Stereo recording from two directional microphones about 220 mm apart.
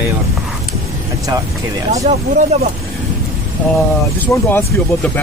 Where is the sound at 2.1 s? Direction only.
30° right (ahead or behind).